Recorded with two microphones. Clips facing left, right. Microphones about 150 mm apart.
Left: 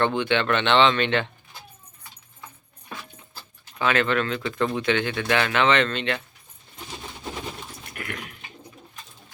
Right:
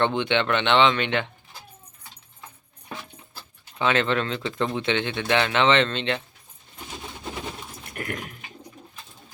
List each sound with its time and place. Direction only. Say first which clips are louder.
0.0 s speech: even; 20° right (ahead or behind)
3.8 s speech: even; 25° right (ahead or behind)
7.9 s dog: right 3 dB; 45° right (ahead or behind)